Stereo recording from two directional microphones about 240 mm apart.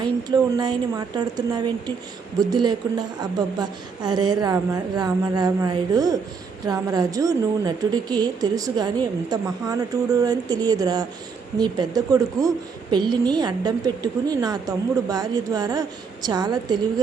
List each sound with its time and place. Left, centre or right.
0.0 s a woman's voice: centre